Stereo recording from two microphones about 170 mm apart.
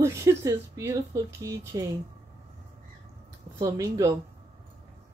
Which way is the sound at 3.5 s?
20° right (ahead or behind).